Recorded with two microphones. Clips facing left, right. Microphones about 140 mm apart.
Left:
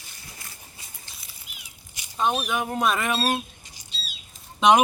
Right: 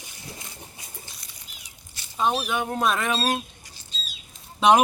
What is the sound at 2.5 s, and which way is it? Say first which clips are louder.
Speech: even; centre (ahead or behind).